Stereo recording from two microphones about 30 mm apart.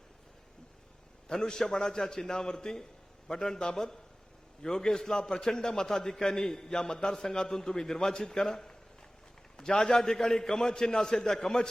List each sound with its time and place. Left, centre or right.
1.3 s a man's voice: left